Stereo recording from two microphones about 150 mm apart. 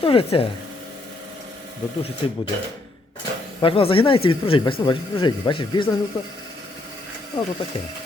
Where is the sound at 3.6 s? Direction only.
35° left (ahead or behind).